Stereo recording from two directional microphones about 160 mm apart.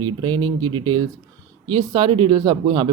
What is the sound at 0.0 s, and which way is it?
Speech, 25° right (ahead or behind).